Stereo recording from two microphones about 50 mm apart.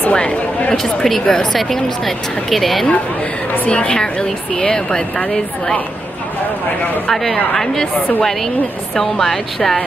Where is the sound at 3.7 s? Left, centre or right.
Centre.